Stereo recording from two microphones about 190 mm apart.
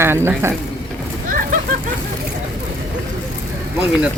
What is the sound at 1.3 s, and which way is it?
Vehicle, 45° right (ahead or behind).